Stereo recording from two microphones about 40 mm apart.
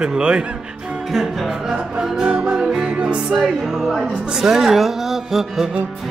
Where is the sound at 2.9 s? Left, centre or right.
Right.